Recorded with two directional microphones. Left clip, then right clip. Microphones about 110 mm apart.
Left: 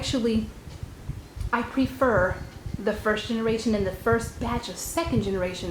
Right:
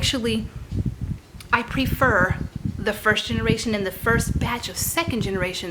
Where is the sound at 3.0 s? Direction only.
60° right (ahead or behind); by 5.3 s 40° right (ahead or behind).